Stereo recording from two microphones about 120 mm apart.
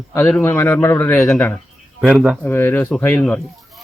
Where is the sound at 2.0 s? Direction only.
5° right (ahead or behind).